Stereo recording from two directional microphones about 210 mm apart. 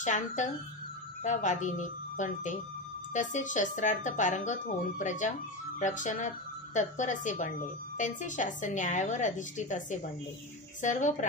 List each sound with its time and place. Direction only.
0.0 s speech: 35° left (ahead or behind)